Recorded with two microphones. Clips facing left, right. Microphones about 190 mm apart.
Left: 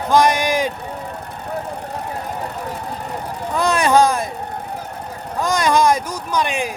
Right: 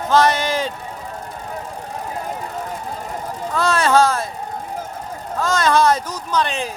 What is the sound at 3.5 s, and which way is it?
Speech, 15° left (ahead or behind).